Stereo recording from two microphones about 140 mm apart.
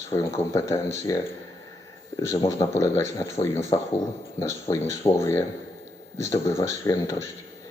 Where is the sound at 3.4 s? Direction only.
50° left (ahead or behind).